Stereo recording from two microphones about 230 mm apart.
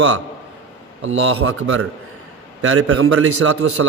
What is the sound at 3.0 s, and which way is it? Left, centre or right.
Speech, right.